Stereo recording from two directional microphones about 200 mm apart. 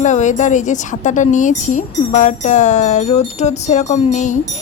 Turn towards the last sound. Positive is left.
turn(degrees=35)  # may be behind; listen again after turning